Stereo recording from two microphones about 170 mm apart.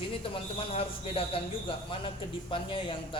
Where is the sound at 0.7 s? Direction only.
35° left (ahead or behind).